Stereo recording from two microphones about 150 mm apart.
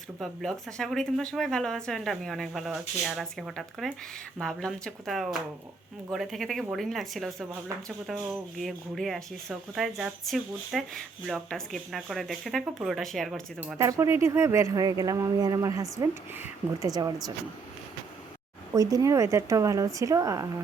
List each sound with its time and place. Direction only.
0.2 s speech: centre (ahead or behind)
13.7 s speech: 20° right (ahead or behind)
18.7 s speech: 25° right (ahead or behind)